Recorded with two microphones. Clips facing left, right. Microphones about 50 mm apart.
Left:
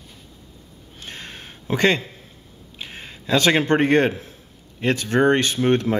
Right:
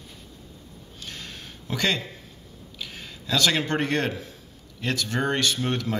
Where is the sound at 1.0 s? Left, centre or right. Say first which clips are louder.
Left 3 dB; left.